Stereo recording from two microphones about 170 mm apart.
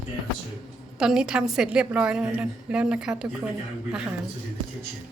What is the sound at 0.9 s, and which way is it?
A woman's voice, 5° right (ahead or behind).